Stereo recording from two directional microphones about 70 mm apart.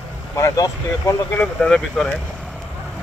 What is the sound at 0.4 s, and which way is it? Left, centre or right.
Speech, left.